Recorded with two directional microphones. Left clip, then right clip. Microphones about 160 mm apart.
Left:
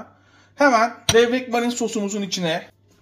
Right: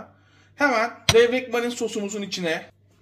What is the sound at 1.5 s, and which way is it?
Speech, 35° left (ahead or behind).